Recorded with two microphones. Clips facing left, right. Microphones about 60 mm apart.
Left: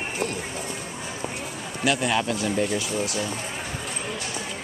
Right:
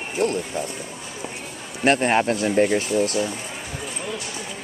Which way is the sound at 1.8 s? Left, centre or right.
Right.